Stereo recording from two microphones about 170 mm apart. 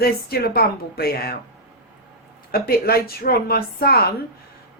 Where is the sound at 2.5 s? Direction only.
65° left (ahead or behind).